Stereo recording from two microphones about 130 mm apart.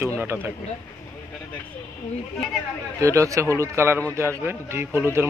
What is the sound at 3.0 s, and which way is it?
A man's voice, 25° right (ahead or behind).